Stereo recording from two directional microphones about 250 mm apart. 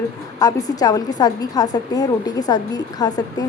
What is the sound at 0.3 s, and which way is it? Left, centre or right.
A woman's voice, centre.